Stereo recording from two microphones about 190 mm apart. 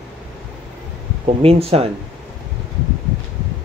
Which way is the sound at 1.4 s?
30° right (ahead or behind).